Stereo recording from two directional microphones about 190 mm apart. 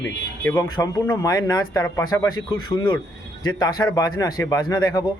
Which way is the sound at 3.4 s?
20° left (ahead or behind).